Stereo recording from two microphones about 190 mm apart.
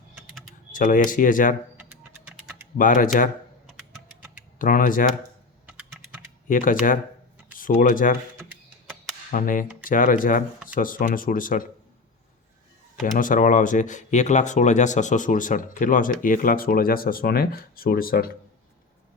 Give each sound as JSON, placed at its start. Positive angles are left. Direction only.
{"t": 0.7, "sound": "speech", "side_deg": 45}
{"t": 2.7, "sound": "speech", "side_deg": 45}
{"t": 4.5, "sound": "speech", "side_deg": 45}
{"t": 6.5, "sound": "speech", "side_deg": 45}
{"t": 9.3, "sound": "speech", "side_deg": 45}
{"t": 13.1, "sound": "speech", "side_deg": 45}